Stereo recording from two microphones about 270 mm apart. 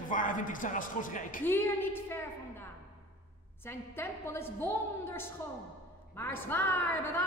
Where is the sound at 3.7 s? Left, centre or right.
Centre.